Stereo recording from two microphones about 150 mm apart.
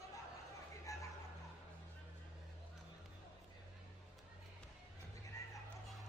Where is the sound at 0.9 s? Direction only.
20° left (ahead or behind).